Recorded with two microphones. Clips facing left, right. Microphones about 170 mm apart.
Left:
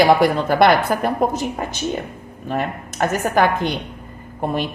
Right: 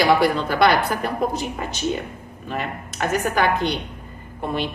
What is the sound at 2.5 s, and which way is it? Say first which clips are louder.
Speech: left 5 dB; 45° left (ahead or behind).